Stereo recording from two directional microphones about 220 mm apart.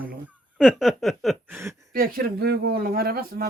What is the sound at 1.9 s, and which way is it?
Speech, 40° right (ahead or behind).